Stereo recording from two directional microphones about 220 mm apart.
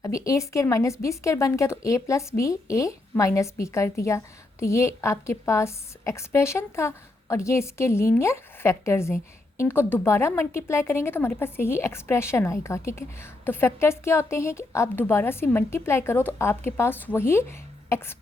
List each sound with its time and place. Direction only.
0.0 s a woman's voice: 15° left (ahead or behind)